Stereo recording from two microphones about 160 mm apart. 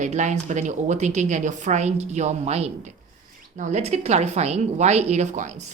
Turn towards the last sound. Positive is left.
turn(degrees=-50)  # may be behind; listen again after turning